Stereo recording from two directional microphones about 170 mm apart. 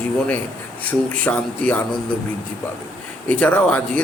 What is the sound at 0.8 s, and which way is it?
Speech, 10° left (ahead or behind).